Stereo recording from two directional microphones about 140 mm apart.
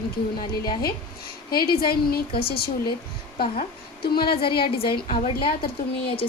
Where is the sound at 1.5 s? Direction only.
90° left.